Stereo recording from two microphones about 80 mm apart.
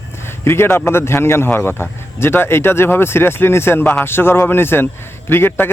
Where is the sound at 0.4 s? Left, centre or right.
Left.